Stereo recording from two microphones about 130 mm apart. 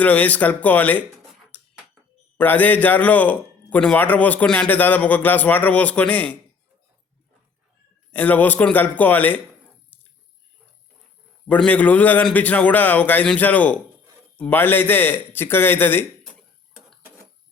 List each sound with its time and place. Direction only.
0.0 s a man's voice: 10° left (ahead or behind)
1.5 s a sound: 10° left (ahead or behind)
2.4 s a man's voice: 15° left (ahead or behind)
8.1 s a man's voice: 15° left (ahead or behind)
11.4 s a man's voice: 10° left (ahead or behind)